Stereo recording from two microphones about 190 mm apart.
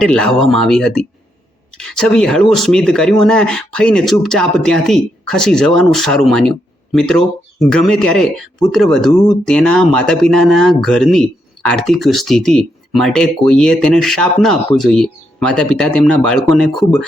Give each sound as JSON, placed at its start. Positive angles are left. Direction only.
{"t": 0.0, "sound": "speech", "side_deg": 5}